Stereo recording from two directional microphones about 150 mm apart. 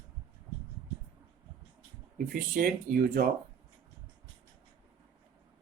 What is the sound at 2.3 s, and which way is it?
Speech, 65° right (ahead or behind).